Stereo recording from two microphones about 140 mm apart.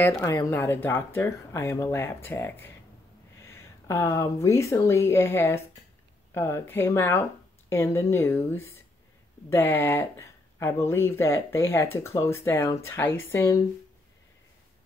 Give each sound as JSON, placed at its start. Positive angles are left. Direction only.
{"t": 0.0, "sound": "speech", "side_deg": 20}